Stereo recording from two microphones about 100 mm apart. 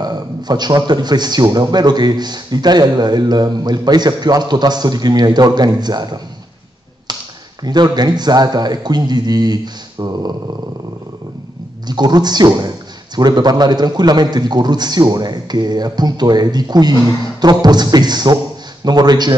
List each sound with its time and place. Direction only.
0.0 s a man's voice: 45° right (ahead or behind)
7.6 s a man's voice: 45° right (ahead or behind)
11.9 s a man's voice: 45° right (ahead or behind)